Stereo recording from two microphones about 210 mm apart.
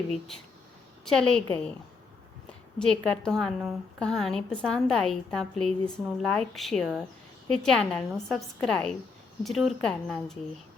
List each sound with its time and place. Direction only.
1.0 s a woman's voice: 5° left (ahead or behind)
2.7 s a woman's voice: 5° left (ahead or behind)